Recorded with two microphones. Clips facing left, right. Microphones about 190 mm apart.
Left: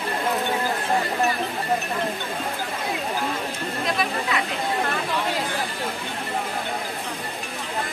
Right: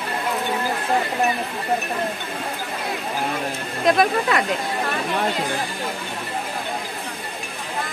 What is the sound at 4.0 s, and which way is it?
Speech, 55° right (ahead or behind).